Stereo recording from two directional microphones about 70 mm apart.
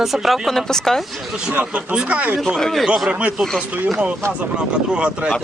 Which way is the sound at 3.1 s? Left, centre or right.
Centre.